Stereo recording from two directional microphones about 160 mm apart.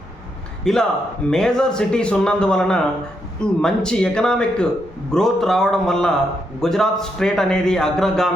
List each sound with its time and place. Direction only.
0.6 s a man's voice: 5° left (ahead or behind)